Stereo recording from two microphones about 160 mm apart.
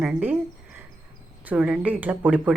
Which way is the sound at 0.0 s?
10° right (ahead or behind).